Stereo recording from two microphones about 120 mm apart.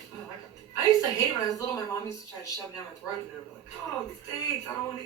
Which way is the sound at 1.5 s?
30° left (ahead or behind).